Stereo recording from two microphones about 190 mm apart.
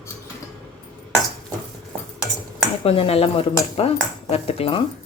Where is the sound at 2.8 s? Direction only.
30° left (ahead or behind).